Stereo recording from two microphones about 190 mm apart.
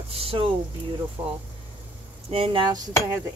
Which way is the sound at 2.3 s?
30° right (ahead or behind).